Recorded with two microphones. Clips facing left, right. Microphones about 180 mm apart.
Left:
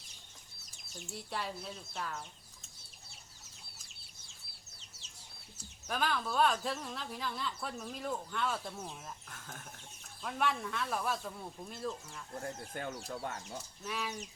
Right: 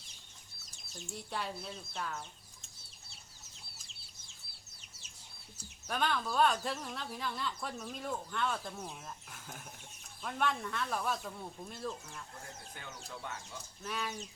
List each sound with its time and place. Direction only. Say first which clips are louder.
0.9 s speech: even; centre (ahead or behind)
5.9 s speech: even; centre (ahead or behind)
9.3 s speech: even; 10° right (ahead or behind)
12.4 s speech: left 9 dB; 50° left (ahead or behind)
13.8 s speech: even; centre (ahead or behind)